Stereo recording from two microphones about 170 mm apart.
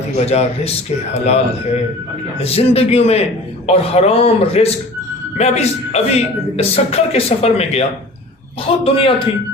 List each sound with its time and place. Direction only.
0.2 s a man's voice: 40° left (ahead or behind)